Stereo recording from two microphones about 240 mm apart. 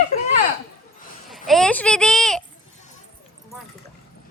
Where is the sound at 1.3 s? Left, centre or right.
Centre.